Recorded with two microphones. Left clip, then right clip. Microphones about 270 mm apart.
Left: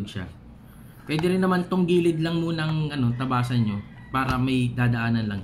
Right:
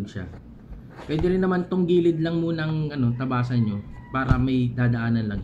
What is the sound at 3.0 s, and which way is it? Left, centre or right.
Speech, left.